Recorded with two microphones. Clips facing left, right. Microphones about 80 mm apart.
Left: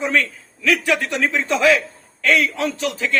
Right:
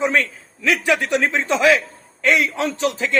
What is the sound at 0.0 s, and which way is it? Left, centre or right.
A man's voice, right.